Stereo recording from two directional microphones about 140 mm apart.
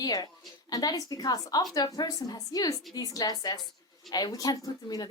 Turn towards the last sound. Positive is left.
turn(degrees=25)  # may be behind; listen again after turning